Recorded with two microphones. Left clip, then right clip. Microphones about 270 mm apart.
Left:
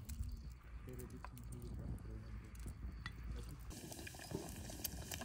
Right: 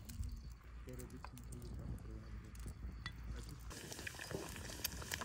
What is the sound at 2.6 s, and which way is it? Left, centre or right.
Boat, centre.